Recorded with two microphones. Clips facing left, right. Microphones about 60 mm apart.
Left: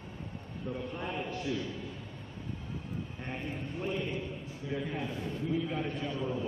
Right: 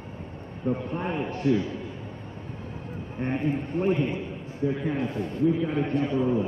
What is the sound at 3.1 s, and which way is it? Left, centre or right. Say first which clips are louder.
A man's voice: right 16 dB; right.